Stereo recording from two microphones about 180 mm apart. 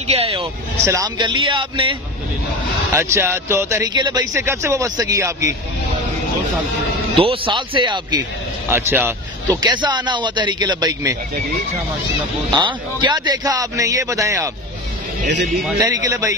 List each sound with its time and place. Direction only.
0.1 s vehicle: 30° right (ahead or behind)
0.8 s a man's voice: 20° right (ahead or behind)
2.9 s speech: 15° right (ahead or behind)
7.2 s a man's voice: 30° right (ahead or behind)
8.6 s a man's voice: 10° right (ahead or behind)
12.4 s a man's voice: 25° right (ahead or behind)
15.8 s a man's voice: 20° right (ahead or behind)